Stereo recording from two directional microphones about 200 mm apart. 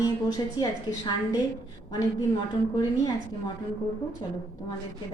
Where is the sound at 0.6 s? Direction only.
20° left (ahead or behind).